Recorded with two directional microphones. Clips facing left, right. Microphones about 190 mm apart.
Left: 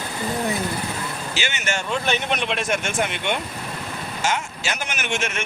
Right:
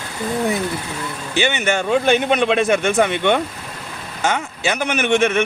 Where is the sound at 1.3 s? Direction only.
55° right (ahead or behind).